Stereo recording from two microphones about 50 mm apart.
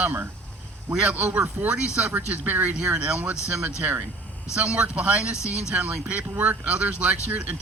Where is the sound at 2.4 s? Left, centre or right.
Right.